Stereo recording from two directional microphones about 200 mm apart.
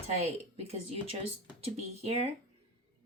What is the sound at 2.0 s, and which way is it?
Speech, 30° right (ahead or behind).